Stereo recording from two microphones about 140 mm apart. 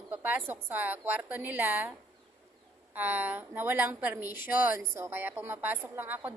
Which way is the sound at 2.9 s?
10° right (ahead or behind).